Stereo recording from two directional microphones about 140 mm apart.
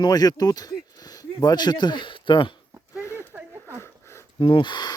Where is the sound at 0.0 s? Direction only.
30° left (ahead or behind).